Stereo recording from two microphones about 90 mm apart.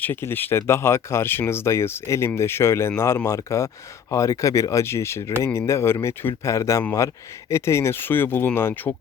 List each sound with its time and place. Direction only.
0.0 s speech: 25° left (ahead or behind)